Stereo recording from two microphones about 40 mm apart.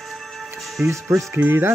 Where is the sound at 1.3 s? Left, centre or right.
Right.